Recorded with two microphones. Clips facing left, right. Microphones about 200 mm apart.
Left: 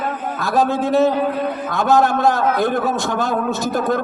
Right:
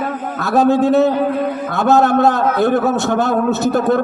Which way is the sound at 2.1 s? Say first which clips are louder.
Right 3 dB; 65° right (ahead or behind).